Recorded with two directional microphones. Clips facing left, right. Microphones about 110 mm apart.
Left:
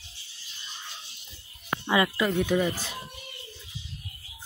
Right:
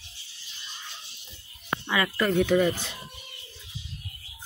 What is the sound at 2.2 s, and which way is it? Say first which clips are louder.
Speech: right 3 dB; 5° left (ahead or behind).